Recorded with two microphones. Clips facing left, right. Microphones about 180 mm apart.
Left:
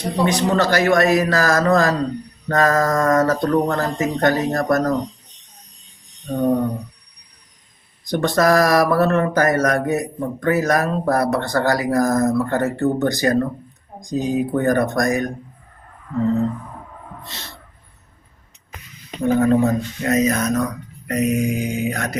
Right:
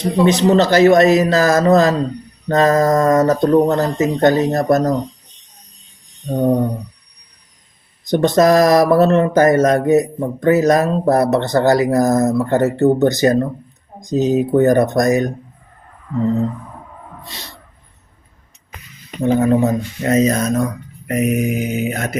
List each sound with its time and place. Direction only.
0.3 s speech: 20° right (ahead or behind)
8.0 s speech: 20° right (ahead or behind)
19.2 s speech: 25° right (ahead or behind)